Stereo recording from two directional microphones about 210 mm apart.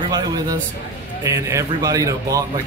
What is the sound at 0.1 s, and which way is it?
A man's voice, 20° right (ahead or behind).